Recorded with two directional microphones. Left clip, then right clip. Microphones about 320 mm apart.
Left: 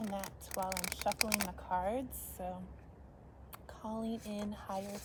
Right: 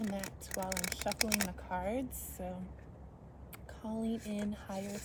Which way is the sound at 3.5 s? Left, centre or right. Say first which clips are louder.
Even; centre.